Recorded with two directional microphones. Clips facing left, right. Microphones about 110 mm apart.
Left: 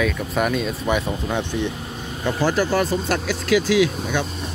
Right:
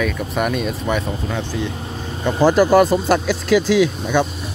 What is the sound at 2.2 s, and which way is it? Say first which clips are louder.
Speech: right 6 dB; 25° right (ahead or behind).